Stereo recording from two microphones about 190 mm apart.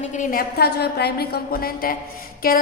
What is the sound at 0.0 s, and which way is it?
A woman's voice, 40° left (ahead or behind).